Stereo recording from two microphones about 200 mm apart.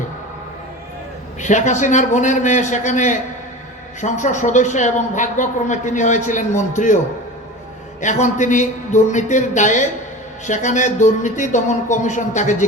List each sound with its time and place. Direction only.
1.4 s speech: 40° left (ahead or behind)
8.0 s speech: 40° left (ahead or behind)